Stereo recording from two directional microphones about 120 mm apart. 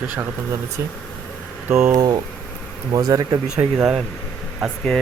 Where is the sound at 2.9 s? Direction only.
35° right (ahead or behind).